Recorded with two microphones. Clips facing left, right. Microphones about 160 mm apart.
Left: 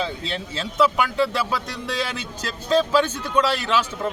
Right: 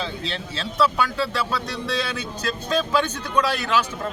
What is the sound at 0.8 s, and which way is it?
Speech, 20° left (ahead or behind).